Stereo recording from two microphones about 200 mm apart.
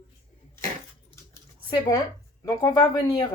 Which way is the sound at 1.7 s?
15° left (ahead or behind).